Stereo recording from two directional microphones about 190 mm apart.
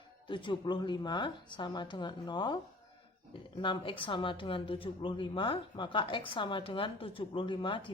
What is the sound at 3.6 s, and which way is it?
A woman's voice, 25° left (ahead or behind).